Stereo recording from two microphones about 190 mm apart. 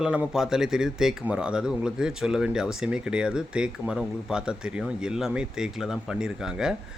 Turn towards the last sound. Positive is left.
turn(degrees=-5)  # may be behind; listen again after turning